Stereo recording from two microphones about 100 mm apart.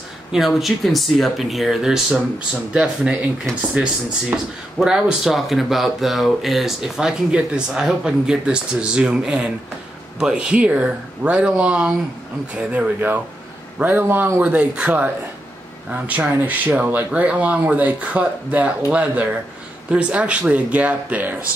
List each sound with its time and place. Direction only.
0.3 s speech: centre (ahead or behind)